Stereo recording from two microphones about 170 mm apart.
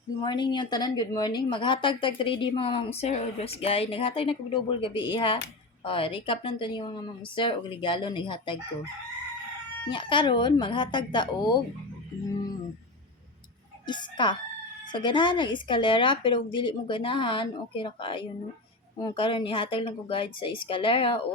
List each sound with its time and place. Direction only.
0.2 s speech: 25° left (ahead or behind)
9.9 s speech: 30° left (ahead or behind)
13.8 s speech: 25° left (ahead or behind)